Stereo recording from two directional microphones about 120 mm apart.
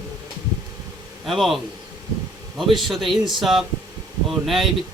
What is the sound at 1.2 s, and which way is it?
A man's voice, centre (ahead or behind).